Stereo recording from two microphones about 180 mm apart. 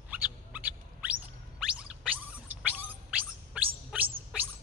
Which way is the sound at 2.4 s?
10° right (ahead or behind).